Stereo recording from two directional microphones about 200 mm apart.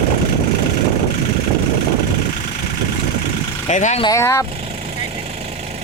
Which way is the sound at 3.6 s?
35° left (ahead or behind).